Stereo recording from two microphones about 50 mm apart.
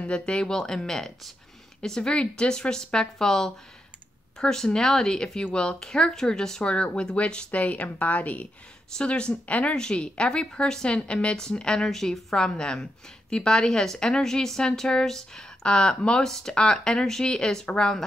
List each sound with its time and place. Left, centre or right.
0.0 s a woman's voice: centre
8.9 s a woman's voice: centre